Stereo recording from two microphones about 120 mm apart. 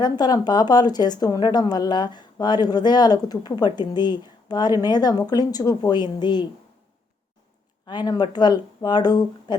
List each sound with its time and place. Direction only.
0.0 s a woman's voice: 35° left (ahead or behind)
7.9 s a woman's voice: 35° left (ahead or behind)